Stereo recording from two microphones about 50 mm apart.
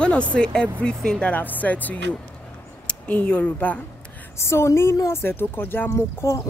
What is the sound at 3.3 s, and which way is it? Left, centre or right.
Speech, left.